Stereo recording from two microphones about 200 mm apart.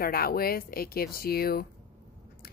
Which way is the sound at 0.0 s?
50° left (ahead or behind).